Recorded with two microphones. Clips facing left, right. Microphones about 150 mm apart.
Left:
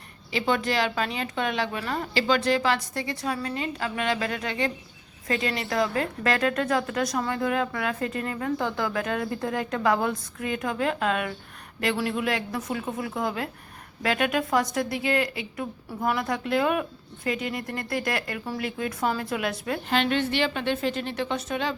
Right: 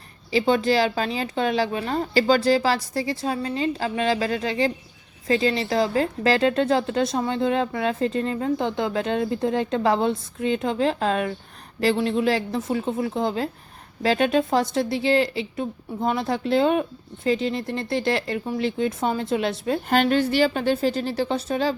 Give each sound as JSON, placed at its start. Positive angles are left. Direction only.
{"t": 0.3, "sound": "a woman's voice", "side_deg": -30}
{"t": 19.9, "sound": "a woman's voice", "side_deg": -40}